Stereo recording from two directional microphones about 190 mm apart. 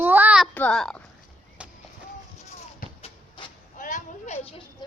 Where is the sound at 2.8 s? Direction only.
45° left (ahead or behind).